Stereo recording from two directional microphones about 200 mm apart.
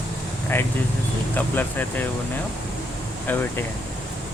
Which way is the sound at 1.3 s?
10° left (ahead or behind).